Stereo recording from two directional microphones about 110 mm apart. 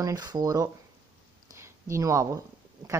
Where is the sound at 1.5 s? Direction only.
25° right (ahead or behind).